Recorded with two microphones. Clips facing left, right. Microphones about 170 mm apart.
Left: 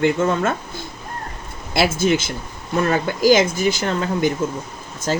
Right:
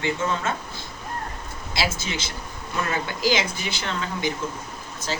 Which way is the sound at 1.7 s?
55° left (ahead or behind).